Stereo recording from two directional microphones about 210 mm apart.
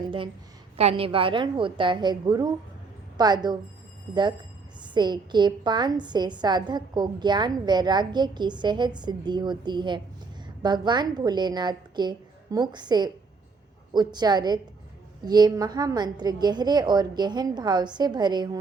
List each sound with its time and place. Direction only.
0.8 s a woman's voice: 30° right (ahead or behind)